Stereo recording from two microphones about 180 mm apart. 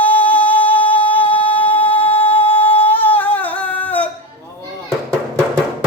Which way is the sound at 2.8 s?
10° left (ahead or behind).